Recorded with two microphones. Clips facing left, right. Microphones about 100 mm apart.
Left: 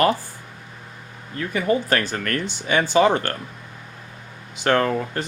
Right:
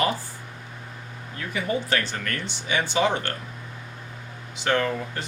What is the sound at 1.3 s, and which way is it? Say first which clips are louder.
Speech: left 6 dB; 45° left (ahead or behind).